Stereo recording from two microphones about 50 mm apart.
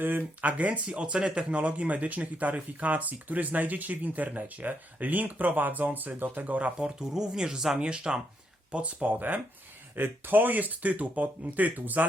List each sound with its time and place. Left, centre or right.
0.0 s speech: right
0.5 s speech: right
6.7 s speech: centre
8.7 s speech: right